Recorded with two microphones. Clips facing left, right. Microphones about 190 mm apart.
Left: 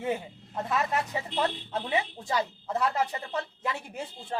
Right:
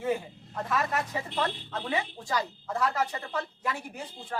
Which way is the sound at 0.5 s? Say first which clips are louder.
Left 1 dB; 20° left (ahead or behind).